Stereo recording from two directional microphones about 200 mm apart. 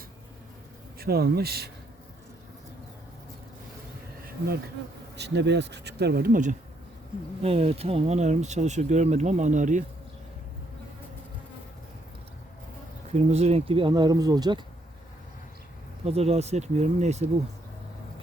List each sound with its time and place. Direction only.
0.9 s speech: 50° right (ahead or behind)
4.3 s bee: 50° right (ahead or behind)
5.1 s speech: 60° right (ahead or behind); by 9.8 s 40° right (ahead or behind)
13.1 s speech: 35° right (ahead or behind)
16.0 s speech: 30° right (ahead or behind)